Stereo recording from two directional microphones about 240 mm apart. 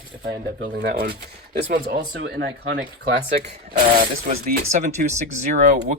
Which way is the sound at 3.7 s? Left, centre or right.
Right.